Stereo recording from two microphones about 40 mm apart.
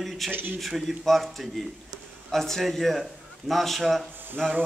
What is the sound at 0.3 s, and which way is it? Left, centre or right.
Speech, right.